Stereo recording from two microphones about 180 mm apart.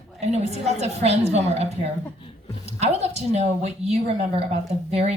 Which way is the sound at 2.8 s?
35° right (ahead or behind).